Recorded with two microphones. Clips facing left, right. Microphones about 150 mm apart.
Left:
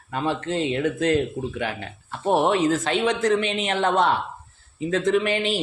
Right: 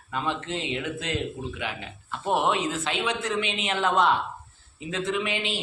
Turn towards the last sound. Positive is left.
turn(degrees=40)  # may be behind; listen again after turning